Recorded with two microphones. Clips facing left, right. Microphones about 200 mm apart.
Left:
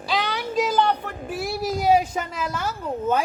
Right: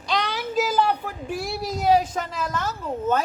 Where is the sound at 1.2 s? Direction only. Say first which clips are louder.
Left 2 dB; 5° left (ahead or behind).